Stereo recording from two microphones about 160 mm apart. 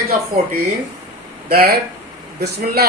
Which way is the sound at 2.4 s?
85° right.